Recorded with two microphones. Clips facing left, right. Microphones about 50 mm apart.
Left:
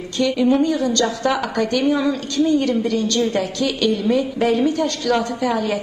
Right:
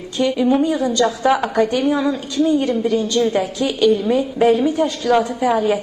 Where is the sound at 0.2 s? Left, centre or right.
Centre.